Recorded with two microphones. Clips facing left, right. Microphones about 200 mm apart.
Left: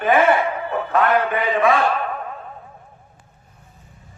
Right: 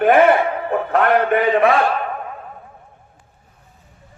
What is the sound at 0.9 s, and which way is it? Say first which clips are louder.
Speech: right 3 dB; 60° right (ahead or behind).